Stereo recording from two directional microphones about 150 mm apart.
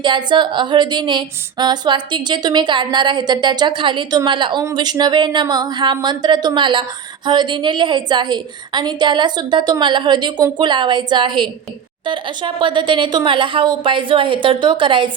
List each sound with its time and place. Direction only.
0.0 s a woman's voice: 30° right (ahead or behind)